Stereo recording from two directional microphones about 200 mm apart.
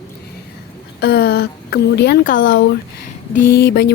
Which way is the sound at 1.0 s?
50° left (ahead or behind).